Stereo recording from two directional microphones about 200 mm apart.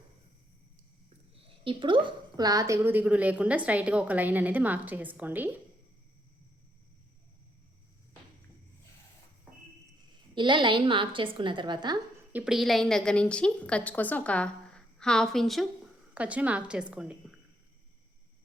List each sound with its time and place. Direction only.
1.5 s a woman's voice: 25° right (ahead or behind); by 5.5 s 10° right (ahead or behind)
9.5 s a sound: 5° right (ahead or behind)
10.3 s a woman's voice: 25° right (ahead or behind)
12.3 s a woman's voice: 5° right (ahead or behind)